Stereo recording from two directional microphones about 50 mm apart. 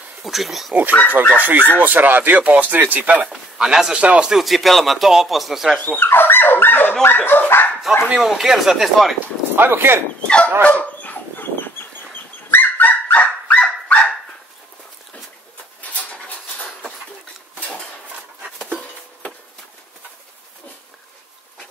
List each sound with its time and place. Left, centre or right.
0.2 s speech: centre
1.2 s speech: right
3.3 s speech: centre
4.4 s speech: centre
5.9 s speech: left
7.9 s speech: centre
9.6 s speech: right
10.2 s dog: left
10.6 s dog: left
15.9 s dog: left